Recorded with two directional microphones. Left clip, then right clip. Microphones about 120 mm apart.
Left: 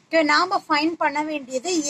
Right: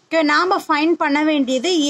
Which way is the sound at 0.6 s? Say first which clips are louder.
Right 4 dB; 45° right (ahead or behind).